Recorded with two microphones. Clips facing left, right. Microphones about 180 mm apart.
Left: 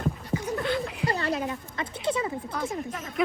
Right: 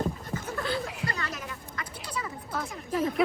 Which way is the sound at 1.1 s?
30° left (ahead or behind).